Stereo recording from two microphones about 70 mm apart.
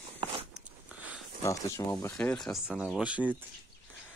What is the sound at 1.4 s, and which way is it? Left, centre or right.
Speech, left.